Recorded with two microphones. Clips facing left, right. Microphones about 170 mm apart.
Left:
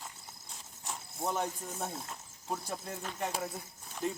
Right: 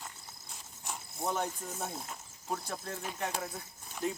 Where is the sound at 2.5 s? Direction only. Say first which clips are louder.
Even; 10° left (ahead or behind).